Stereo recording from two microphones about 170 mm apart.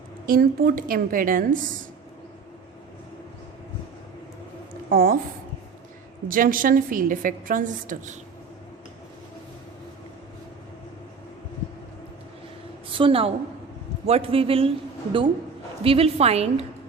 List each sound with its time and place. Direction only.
0.3 s a woman's voice: 60° right (ahead or behind)
4.9 s a woman's voice: 55° right (ahead or behind)
6.2 s a woman's voice: 55° right (ahead or behind)
12.9 s a woman's voice: 30° right (ahead or behind)
15.8 s a woman's voice: 35° right (ahead or behind)